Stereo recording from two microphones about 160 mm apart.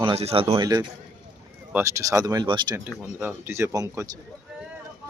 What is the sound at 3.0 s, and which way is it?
Speech, 10° right (ahead or behind).